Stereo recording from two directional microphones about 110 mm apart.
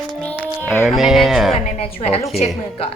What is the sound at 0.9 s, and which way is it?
Speech, centre (ahead or behind).